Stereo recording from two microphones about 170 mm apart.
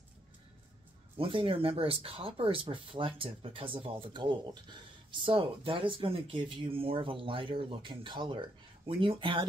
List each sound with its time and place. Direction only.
1.1 s speech: 35° right (ahead or behind)